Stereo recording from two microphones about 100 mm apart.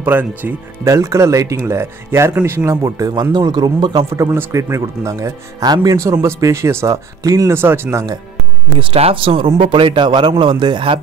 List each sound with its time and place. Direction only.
0.0 s speech: 20° right (ahead or behind)
0.8 s speech: 30° right (ahead or behind)
4.1 s speech: 25° right (ahead or behind)
7.5 s speech: 25° right (ahead or behind)
8.7 s a man's voice: 75° right (ahead or behind); by 11.0 s 55° right (ahead or behind)